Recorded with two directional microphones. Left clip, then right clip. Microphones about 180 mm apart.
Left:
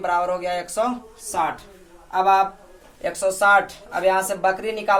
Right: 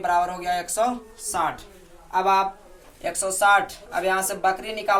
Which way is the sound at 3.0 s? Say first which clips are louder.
Left 2 dB; 35° left (ahead or behind).